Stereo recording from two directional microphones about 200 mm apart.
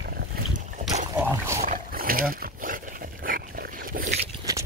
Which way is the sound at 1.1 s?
10° right (ahead or behind).